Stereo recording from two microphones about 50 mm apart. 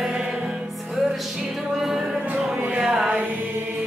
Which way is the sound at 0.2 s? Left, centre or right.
Centre.